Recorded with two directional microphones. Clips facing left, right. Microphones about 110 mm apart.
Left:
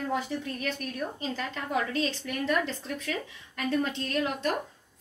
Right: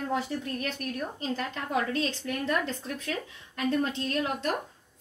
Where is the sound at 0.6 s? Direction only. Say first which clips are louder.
Even; 10° right (ahead or behind).